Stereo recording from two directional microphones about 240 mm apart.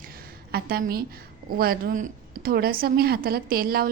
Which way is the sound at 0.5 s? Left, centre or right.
Right.